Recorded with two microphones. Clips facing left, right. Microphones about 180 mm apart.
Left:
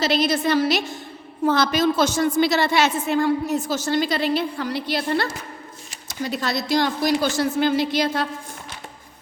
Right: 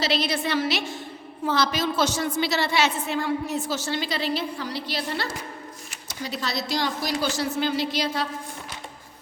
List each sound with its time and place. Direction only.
0.0 s a woman's voice: 45° left (ahead or behind)
1.5 s a woman's voice: 50° left (ahead or behind)